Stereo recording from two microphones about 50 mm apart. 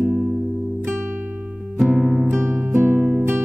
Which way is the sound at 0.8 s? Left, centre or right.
Right.